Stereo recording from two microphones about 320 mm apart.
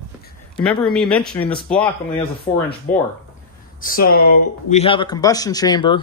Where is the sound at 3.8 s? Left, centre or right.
Left.